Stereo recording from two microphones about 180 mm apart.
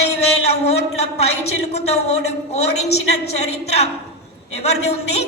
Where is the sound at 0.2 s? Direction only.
35° left (ahead or behind).